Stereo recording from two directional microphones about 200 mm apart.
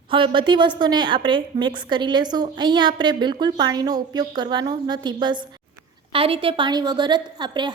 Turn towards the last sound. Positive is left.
turn(degrees=-20)  # may be behind; listen again after turning